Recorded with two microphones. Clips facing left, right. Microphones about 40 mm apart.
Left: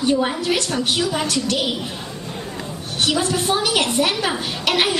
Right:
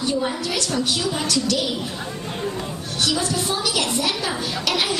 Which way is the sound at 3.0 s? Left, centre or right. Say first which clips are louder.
Left 3 dB; left.